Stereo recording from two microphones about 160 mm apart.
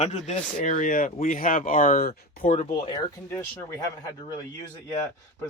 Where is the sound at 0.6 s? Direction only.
55° left (ahead or behind).